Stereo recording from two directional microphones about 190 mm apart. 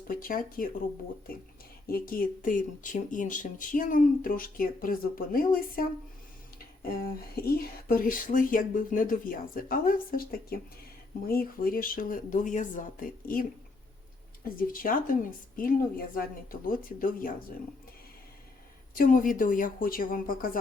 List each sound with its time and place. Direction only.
0.2 s speech: 50° left (ahead or behind)
1.9 s speech: 50° left (ahead or behind)
14.4 s speech: 45° left (ahead or behind)
18.9 s speech: 45° left (ahead or behind)